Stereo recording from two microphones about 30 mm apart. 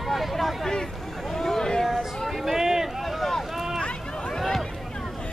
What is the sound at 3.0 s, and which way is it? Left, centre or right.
Boat, centre.